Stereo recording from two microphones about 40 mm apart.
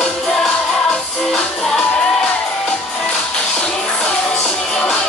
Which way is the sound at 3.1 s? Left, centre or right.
Left.